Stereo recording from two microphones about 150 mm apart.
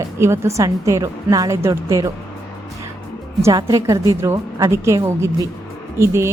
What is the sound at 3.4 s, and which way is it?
A woman's voice, 20° right (ahead or behind).